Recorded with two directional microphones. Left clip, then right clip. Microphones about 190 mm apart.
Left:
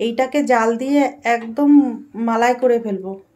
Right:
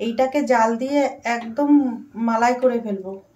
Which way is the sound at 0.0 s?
60° left (ahead or behind).